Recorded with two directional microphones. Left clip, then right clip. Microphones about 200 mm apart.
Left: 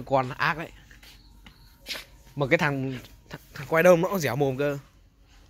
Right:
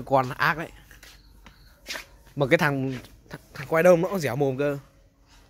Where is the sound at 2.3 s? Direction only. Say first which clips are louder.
Right 2 dB; 20° right (ahead or behind).